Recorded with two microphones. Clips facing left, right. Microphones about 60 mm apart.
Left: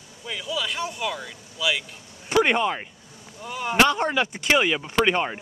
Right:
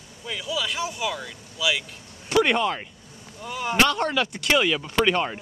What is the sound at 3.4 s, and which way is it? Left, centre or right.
Speech, centre.